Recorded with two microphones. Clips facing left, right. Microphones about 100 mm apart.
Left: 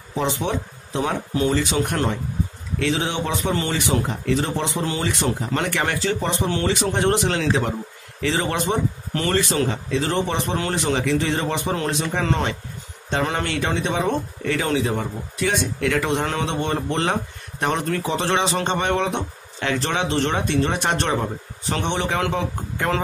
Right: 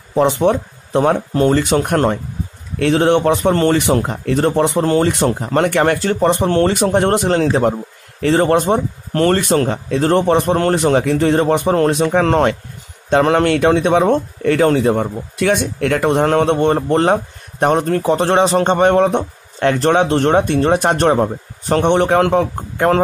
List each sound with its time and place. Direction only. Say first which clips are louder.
0.1 s speech: right 10 dB; 55° right (ahead or behind)